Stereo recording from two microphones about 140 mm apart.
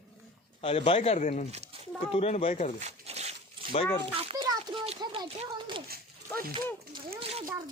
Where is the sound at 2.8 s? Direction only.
50° right (ahead or behind).